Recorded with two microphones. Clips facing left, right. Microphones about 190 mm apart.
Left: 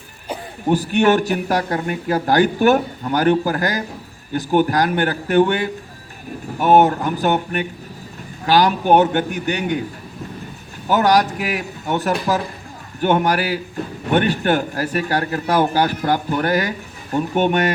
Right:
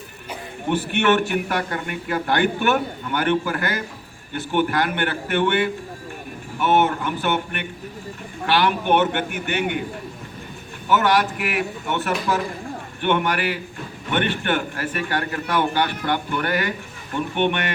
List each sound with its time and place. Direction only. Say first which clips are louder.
0.3 s speech: left 5 dB; 35° left (ahead or behind)
10.8 s speech: left 3 dB; 40° left (ahead or behind)